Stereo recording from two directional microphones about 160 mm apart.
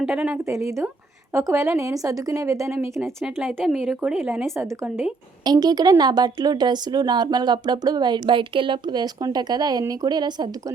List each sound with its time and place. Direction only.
0.0 s a woman's voice: 5° right (ahead or behind)
0.5 s a woman's voice: 20° right (ahead or behind)
3.4 s speech: centre (ahead or behind)
5.5 s speech: 25° right (ahead or behind)